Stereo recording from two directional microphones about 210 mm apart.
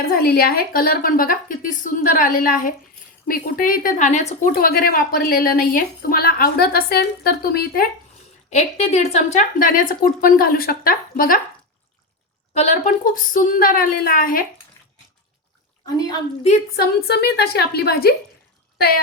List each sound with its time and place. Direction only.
0.0 s speech: 45° left (ahead or behind)
4.5 s speech: 45° left (ahead or behind)
8.4 s speech: 30° left (ahead or behind)
12.5 s speech: 35° left (ahead or behind)
16.7 s speech: 50° left (ahead or behind)